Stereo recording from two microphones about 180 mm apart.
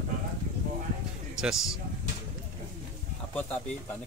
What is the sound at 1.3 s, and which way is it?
Speech, centre (ahead or behind).